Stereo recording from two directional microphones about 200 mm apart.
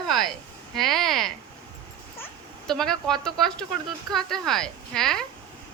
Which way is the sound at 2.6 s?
Centre (ahead or behind).